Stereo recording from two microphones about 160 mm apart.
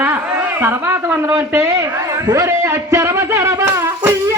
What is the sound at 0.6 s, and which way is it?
A woman's voice, 15° right (ahead or behind).